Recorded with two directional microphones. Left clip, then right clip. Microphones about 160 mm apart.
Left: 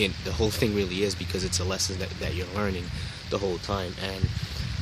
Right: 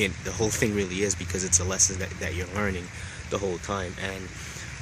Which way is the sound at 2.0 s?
Centre (ahead or behind).